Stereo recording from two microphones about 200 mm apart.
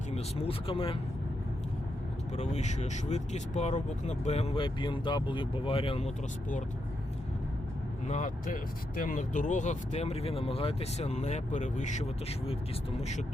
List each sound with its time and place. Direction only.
0.1 s speech: 30° left (ahead or behind)
2.3 s speech: 35° left (ahead or behind)
8.0 s speech: 35° left (ahead or behind)